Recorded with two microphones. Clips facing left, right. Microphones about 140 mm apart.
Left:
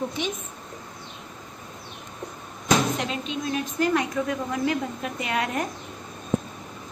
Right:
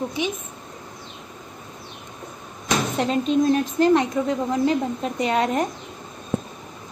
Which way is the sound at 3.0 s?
40° right (ahead or behind).